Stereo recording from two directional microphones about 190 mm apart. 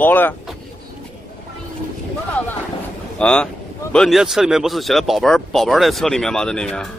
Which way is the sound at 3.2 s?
5° left (ahead or behind).